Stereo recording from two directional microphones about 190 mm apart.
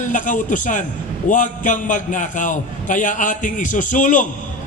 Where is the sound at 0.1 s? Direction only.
40° left (ahead or behind).